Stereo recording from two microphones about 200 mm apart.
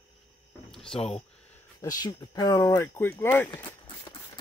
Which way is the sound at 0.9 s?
30° left (ahead or behind).